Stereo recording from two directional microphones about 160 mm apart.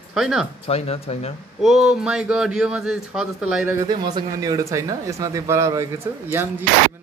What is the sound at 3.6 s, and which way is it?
Speech, 15° right (ahead or behind).